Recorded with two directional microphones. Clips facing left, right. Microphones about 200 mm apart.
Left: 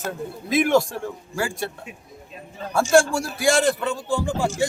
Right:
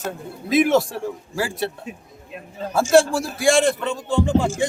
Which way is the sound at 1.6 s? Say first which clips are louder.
Right 4 dB; 30° right (ahead or behind).